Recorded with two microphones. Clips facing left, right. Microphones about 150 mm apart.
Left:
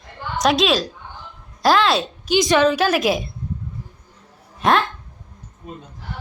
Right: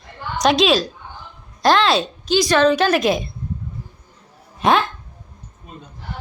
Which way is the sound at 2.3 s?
15° left (ahead or behind).